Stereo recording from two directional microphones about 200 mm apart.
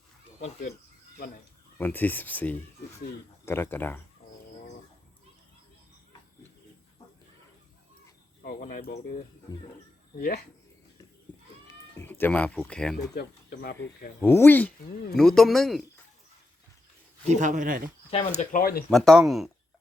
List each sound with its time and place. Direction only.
0.3 s speech: 40° left (ahead or behind)
1.8 s speech: 10° left (ahead or behind)
8.4 s cricket: 45° left (ahead or behind)
9.5 s speech: 20° left (ahead or behind)
10.2 s speech: 50° left (ahead or behind)
11.7 s speech: 10° left (ahead or behind)
13.1 s speech: 55° left (ahead or behind)
14.2 s speech: 10° left (ahead or behind)
17.2 s speech: 40° right (ahead or behind)
18.1 s speech: 35° left (ahead or behind); by 18.9 s 50° left (ahead or behind)
18.9 s speech: centre (ahead or behind)